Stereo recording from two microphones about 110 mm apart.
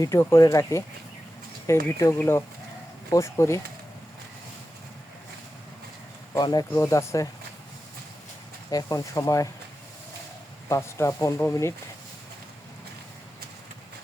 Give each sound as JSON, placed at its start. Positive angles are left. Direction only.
{"t": 0.0, "sound": "speech", "side_deg": 25}
{"t": 6.4, "sound": "speech", "side_deg": 35}
{"t": 6.7, "sound": "speech", "side_deg": 25}
{"t": 8.7, "sound": "speech", "side_deg": 30}
{"t": 10.7, "sound": "speech", "side_deg": 25}